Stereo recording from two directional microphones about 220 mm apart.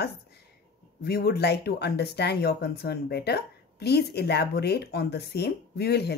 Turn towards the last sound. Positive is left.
turn(degrees=50)  # may be behind; listen again after turning